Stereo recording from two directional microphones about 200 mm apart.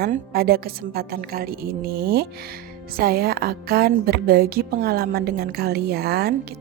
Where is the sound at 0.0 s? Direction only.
50° right (ahead or behind).